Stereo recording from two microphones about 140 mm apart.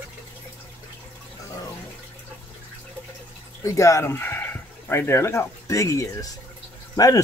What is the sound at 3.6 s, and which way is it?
Speech, 20° left (ahead or behind).